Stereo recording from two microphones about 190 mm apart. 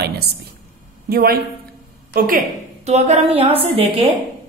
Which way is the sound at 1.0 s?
55° right (ahead or behind).